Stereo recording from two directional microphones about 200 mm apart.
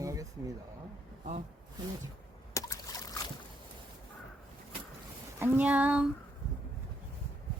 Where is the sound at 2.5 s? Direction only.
15° left (ahead or behind).